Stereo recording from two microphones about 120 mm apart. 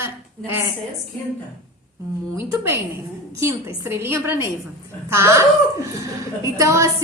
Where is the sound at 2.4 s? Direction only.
20° right (ahead or behind).